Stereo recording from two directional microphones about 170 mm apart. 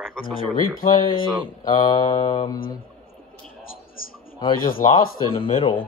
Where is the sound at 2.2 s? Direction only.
30° left (ahead or behind).